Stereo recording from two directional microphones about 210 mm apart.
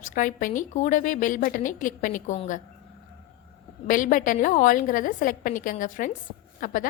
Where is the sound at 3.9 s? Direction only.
40° left (ahead or behind).